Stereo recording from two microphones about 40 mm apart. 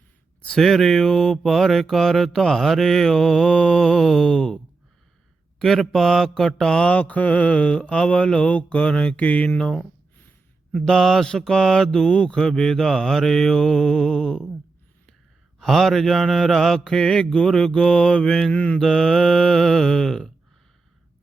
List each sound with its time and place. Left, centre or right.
0.6 s mantra: centre
6.8 s mantra: left
10.7 s speech: left
10.9 s mantra: centre
15.5 s mantra: centre
18.5 s mantra: left
18.8 s mantra: centre